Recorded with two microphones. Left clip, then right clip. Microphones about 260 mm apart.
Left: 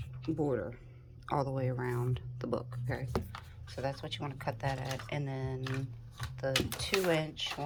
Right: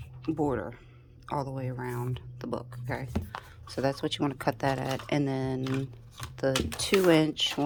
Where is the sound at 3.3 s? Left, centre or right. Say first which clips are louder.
Right 8 dB; centre.